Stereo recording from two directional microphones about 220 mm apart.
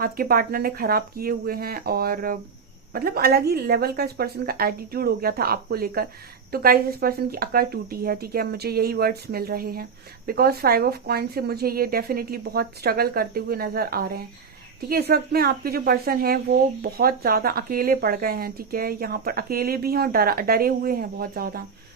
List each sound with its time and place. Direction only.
0.0 s a woman's voice: 40° right (ahead or behind)